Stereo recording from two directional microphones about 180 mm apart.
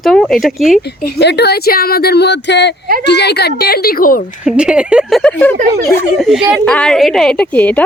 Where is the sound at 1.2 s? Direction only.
70° left (ahead or behind); by 4.2 s 50° left (ahead or behind).